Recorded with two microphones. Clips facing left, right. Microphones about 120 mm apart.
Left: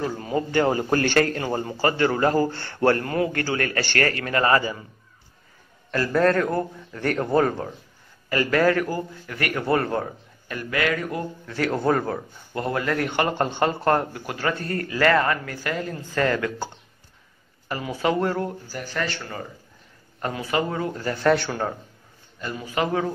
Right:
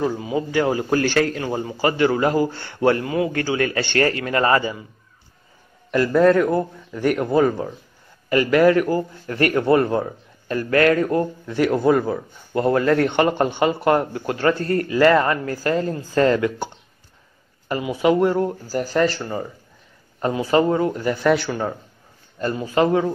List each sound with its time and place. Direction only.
0.0 s a man's voice: 10° right (ahead or behind); by 4.7 s 25° right (ahead or behind)
5.9 s a man's voice: 10° right (ahead or behind)
8.3 s a man's voice: 20° right (ahead or behind)
10.7 s speech: 40° right (ahead or behind)
11.4 s a man's voice: 15° right (ahead or behind)
12.5 s a man's voice: 30° right (ahead or behind)
15.4 s a man's voice: 35° right (ahead or behind); by 18.5 s 20° right (ahead or behind)
18.7 s speech: 40° right (ahead or behind)
20.2 s a man's voice: 25° right (ahead or behind); by 21.7 s centre (ahead or behind)